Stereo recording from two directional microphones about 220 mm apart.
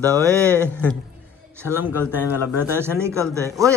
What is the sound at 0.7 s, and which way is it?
Speech, 5° left (ahead or behind).